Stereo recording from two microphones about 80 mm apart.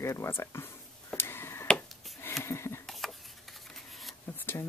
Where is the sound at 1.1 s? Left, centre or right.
Left.